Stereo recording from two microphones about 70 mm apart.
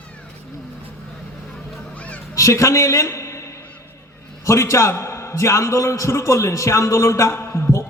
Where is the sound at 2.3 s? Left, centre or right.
Left.